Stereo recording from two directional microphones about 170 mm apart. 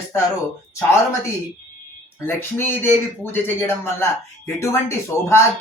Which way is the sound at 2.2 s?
15° left (ahead or behind).